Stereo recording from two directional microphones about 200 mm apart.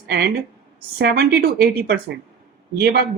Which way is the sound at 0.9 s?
50° right (ahead or behind).